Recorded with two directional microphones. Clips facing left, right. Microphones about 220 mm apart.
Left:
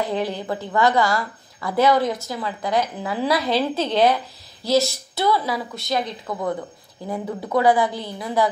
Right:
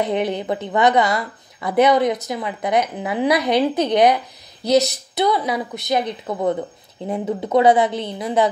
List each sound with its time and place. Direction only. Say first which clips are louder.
0.0 s speech: right 3 dB; 20° right (ahead or behind)